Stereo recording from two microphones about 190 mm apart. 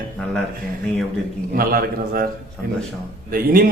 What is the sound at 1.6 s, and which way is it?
Speech, 50° right (ahead or behind).